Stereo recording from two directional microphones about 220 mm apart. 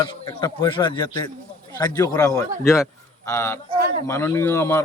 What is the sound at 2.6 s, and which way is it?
Speech, centre (ahead or behind).